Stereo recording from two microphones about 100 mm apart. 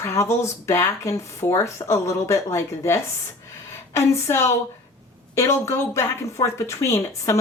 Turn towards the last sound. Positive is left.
turn(degrees=30)  # may be behind; listen again after turning